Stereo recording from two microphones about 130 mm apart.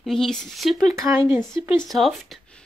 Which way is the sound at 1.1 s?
20° right (ahead or behind).